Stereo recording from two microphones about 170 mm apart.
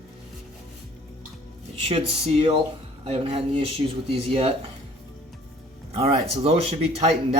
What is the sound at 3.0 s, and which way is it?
Speech, 35° right (ahead or behind).